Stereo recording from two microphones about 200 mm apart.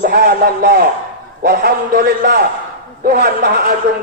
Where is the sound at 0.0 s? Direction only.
50° right (ahead or behind).